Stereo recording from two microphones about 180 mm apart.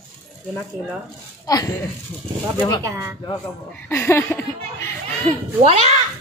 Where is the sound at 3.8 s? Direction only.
15° left (ahead or behind).